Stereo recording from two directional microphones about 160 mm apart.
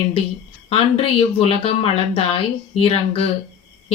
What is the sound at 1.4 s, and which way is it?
Speech, 40° left (ahead or behind).